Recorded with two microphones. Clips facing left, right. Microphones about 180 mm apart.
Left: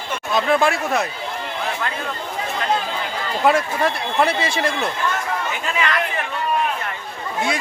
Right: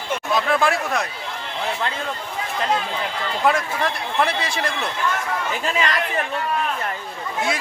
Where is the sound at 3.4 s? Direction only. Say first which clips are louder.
Left 3 dB; 5° left (ahead or behind).